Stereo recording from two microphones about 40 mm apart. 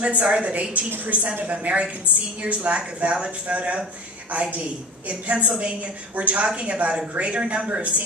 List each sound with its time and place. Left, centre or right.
0.2 s a woman's voice: right